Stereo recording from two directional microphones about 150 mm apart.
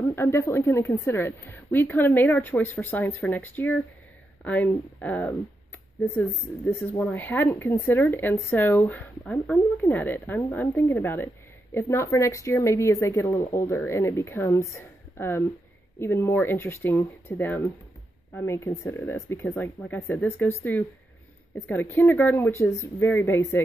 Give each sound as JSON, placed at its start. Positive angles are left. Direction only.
{"t": 0.1, "sound": "a woman's voice", "side_deg": 15}
{"t": 6.9, "sound": "a woman's voice", "side_deg": 10}